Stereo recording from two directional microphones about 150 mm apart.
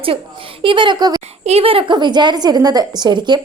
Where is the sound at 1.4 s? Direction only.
40° right (ahead or behind).